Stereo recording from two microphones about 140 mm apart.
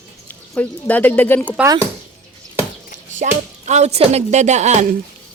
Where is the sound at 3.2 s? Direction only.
90° right.